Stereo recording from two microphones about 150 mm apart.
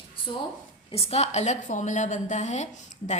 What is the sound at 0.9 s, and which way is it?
A woman's voice, 45° left (ahead or behind).